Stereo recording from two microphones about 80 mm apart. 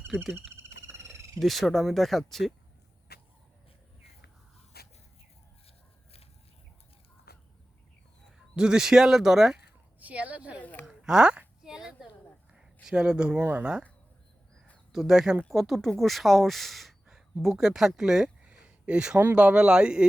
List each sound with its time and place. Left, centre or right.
0.3 s a sound: right
1.4 s speech: centre
8.5 s speech: centre
10.0 s speech: centre
10.6 s speech: left
10.8 s a sound: centre
13.4 s speech: right
14.9 s speech: centre